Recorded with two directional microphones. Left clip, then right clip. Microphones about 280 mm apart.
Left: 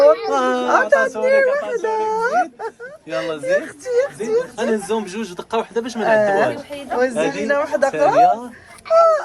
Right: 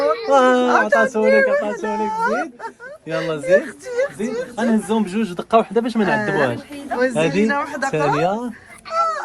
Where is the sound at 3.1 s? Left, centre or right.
Right.